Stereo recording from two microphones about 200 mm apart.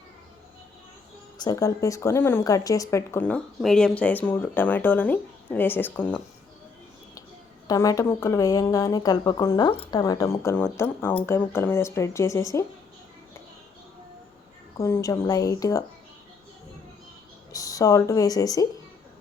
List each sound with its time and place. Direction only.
1.4 s speech: 20° left (ahead or behind)
7.7 s speech: 15° left (ahead or behind)
14.8 s speech: 15° left (ahead or behind)
17.5 s speech: 15° left (ahead or behind)